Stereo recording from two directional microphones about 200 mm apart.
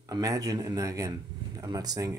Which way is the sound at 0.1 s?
15° right (ahead or behind).